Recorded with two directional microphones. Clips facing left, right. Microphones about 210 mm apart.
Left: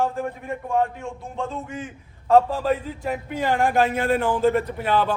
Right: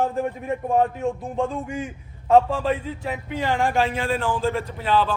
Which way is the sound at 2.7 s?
45° left (ahead or behind).